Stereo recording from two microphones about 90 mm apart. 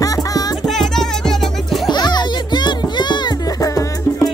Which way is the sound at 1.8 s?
50° left (ahead or behind).